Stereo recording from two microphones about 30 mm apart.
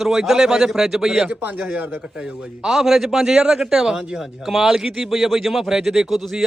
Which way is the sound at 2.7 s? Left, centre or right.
Centre.